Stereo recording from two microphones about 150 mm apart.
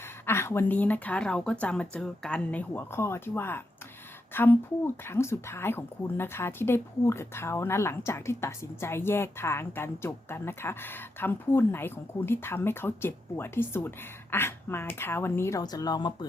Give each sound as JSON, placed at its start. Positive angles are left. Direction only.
{"t": 0.3, "sound": "speech", "side_deg": 15}